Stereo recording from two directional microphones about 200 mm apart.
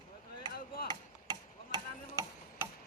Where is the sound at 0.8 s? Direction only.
20° right (ahead or behind).